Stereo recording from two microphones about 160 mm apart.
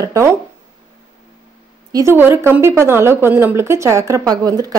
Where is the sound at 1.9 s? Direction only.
25° right (ahead or behind).